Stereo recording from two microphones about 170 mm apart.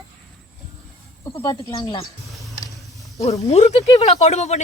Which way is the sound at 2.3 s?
Centre (ahead or behind).